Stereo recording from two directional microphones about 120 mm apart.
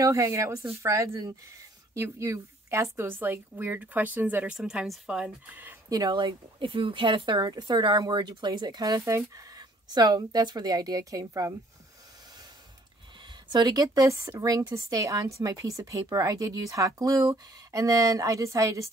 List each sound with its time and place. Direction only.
0.0 s a woman's voice: 25° right (ahead or behind)
5.9 s speech: 35° right (ahead or behind)
13.5 s a woman's voice: 35° right (ahead or behind)